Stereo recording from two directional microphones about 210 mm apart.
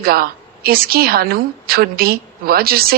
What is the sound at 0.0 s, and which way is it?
A woman's voice, 45° right (ahead or behind).